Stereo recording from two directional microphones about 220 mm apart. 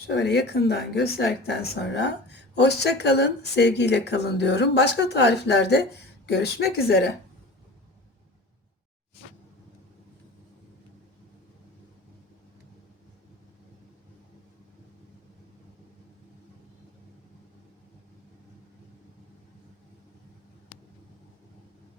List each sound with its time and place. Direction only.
0.1 s speech: 50° left (ahead or behind)